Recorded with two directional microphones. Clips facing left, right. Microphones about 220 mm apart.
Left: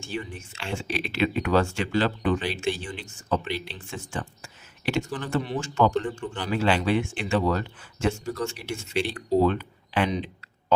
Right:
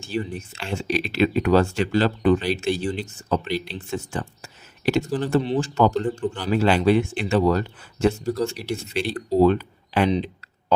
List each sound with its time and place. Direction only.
0.0 s speech: 35° right (ahead or behind)